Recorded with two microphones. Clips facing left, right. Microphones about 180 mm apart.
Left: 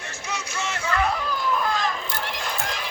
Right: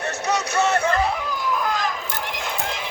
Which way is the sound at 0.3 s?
65° right (ahead or behind).